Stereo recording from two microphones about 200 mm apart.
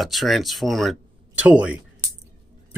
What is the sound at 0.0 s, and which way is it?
Speech, centre (ahead or behind).